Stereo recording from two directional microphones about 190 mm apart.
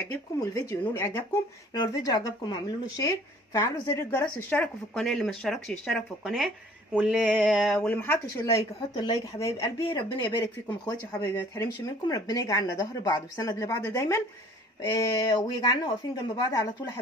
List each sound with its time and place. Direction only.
0.6 s speech: 15° left (ahead or behind)
9.6 s speech: 30° left (ahead or behind)